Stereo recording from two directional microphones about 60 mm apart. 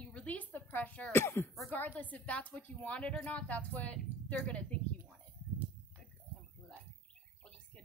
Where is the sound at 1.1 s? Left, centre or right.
Left.